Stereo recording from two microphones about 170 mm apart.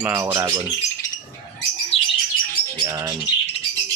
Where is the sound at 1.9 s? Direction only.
35° left (ahead or behind).